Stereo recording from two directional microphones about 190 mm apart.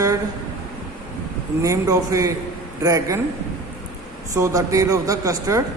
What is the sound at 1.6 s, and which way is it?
A man's voice, 15° right (ahead or behind).